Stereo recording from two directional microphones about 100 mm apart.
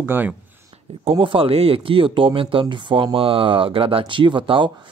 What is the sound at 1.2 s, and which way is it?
Speech, 60° right (ahead or behind).